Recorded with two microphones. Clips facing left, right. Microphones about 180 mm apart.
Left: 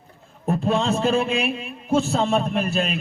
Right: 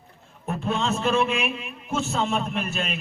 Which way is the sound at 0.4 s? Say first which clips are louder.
Left 5 dB; 35° left (ahead or behind).